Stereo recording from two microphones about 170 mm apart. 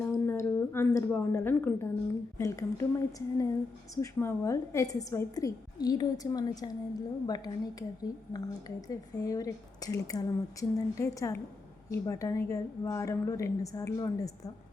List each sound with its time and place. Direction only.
0.3 s a woman's voice: 15° left (ahead or behind)